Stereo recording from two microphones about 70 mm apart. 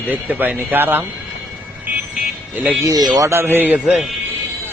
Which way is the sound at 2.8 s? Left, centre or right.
Right.